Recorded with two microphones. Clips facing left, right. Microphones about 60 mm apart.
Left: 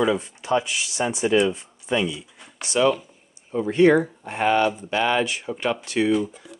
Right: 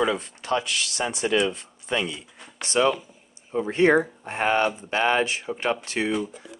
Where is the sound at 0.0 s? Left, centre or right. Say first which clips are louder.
Left 2 dB; right.